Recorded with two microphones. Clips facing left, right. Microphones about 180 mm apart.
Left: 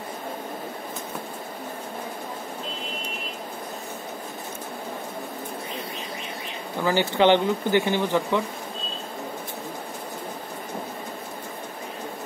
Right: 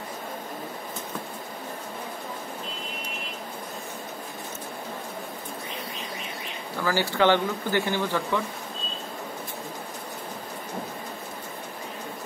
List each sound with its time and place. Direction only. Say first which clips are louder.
6.8 s speech: left 3 dB; 20° left (ahead or behind)